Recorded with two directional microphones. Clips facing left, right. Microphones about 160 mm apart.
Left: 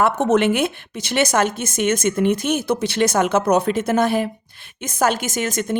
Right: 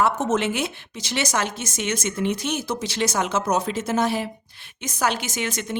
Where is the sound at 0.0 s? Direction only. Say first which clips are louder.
Left 5 dB; 60° left (ahead or behind).